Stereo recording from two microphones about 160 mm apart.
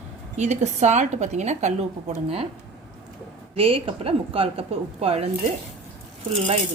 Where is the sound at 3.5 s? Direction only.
35° right (ahead or behind).